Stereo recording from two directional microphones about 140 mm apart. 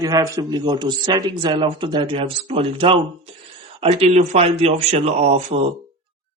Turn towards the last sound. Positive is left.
turn(degrees=-45)  # may be behind; listen again after turning